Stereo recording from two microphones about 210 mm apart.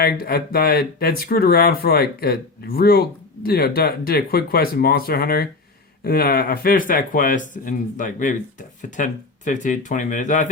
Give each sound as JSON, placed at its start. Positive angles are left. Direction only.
{"t": 0.0, "sound": "speech", "side_deg": 45}